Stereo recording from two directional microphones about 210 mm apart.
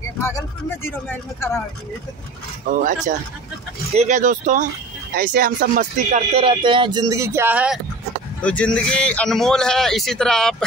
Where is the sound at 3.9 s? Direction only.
35° right (ahead or behind).